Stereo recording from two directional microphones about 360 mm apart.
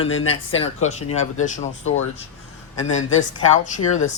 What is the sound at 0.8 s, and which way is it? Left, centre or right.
Speech, centre.